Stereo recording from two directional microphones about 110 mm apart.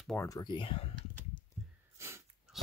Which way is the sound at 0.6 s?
55° left (ahead or behind).